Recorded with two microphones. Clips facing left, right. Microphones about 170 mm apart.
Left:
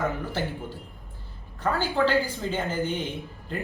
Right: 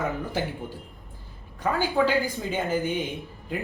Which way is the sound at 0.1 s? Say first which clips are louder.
Right 1 dB; 20° right (ahead or behind).